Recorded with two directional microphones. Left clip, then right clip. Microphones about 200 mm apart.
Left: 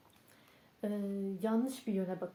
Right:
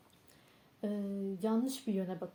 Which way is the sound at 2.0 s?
30° right (ahead or behind).